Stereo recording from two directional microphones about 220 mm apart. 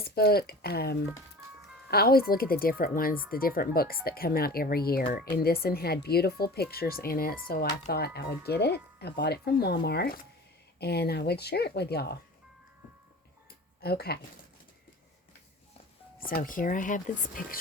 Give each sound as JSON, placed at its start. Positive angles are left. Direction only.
{"t": 0.1, "sound": "speech", "side_deg": 45}
{"t": 13.8, "sound": "speech", "side_deg": 45}
{"t": 16.3, "sound": "speech", "side_deg": 40}